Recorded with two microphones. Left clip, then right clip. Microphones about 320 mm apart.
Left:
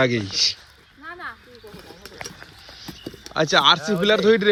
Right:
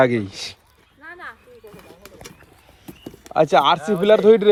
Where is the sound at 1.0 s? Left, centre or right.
Left.